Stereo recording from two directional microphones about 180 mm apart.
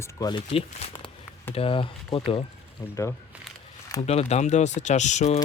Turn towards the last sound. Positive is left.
turn(degrees=40)  # may be behind; listen again after turning